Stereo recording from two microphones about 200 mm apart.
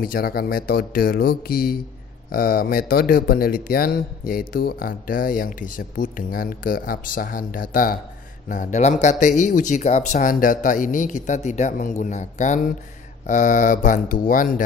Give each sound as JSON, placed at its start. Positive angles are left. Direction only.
{"t": 0.0, "sound": "speech", "side_deg": 50}